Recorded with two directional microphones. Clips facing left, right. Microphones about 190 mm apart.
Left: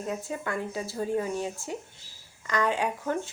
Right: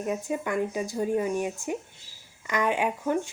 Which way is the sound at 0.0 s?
15° right (ahead or behind).